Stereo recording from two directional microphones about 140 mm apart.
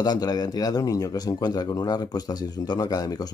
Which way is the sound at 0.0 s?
30° left (ahead or behind).